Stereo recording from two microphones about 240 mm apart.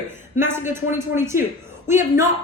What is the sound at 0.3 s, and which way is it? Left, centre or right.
A woman's voice, centre.